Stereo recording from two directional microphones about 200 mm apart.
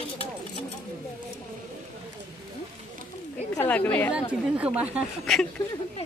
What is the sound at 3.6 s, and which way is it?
Speech, 10° left (ahead or behind).